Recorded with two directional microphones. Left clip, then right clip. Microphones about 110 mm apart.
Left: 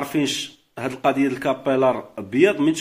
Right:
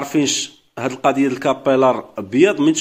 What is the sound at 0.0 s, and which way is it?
A man's voice, 25° right (ahead or behind).